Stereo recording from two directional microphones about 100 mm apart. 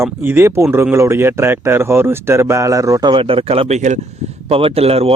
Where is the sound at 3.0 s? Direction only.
60° right (ahead or behind).